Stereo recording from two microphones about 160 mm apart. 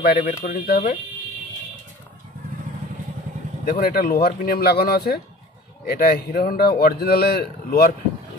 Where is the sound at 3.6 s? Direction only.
70° left (ahead or behind).